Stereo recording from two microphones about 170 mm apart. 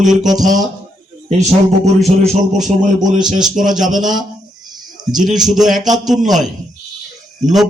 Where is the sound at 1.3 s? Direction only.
40° right (ahead or behind).